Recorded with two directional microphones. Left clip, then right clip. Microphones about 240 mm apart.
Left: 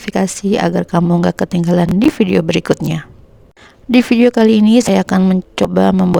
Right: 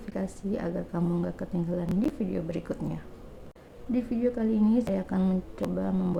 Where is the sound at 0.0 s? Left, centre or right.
Left.